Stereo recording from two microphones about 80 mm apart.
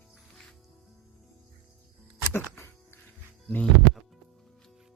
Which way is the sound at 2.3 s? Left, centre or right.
Left.